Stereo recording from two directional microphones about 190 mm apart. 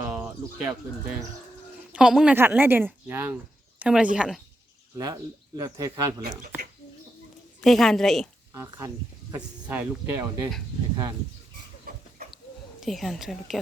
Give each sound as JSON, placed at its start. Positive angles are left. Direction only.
{"t": 0.0, "sound": "a sound", "side_deg": -10}
{"t": 1.9, "sound": "a woman's voice", "side_deg": -5}
{"t": 4.9, "sound": "speech", "side_deg": -15}
{"t": 7.6, "sound": "a woman's voice", "side_deg": 0}
{"t": 8.5, "sound": "speech", "side_deg": -15}
{"t": 12.8, "sound": "a woman's voice", "side_deg": 0}